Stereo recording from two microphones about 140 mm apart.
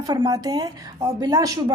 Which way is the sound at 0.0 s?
25° right (ahead or behind).